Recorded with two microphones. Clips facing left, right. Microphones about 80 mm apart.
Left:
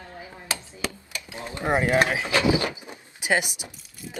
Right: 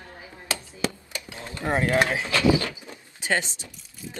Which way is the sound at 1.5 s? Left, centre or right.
Left.